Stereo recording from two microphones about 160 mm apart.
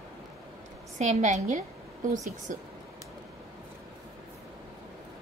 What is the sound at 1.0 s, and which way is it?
A woman's voice, 45° right (ahead or behind).